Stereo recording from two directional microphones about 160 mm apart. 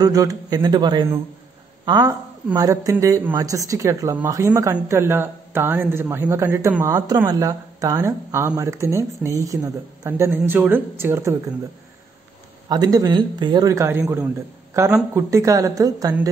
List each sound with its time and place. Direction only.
0.0 s a woman's voice: 20° right (ahead or behind)
12.6 s a woman's voice: 25° right (ahead or behind)